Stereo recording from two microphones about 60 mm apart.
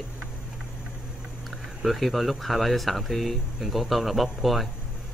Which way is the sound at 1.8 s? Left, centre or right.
Centre.